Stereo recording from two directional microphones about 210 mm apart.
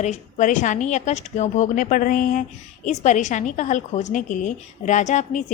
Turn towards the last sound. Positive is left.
turn(degrees=35)  # may be behind; listen again after turning